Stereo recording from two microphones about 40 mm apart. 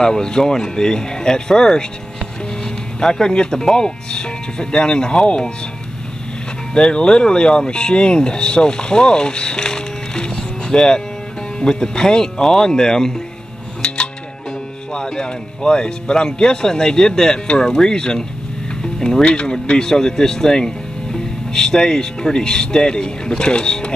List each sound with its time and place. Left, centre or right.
0.0 s speech: centre
3.0 s speech: centre
6.7 s speech: left
14.9 s speech: centre
18.8 s music: centre
19.2 s speech: left
19.8 s speech: centre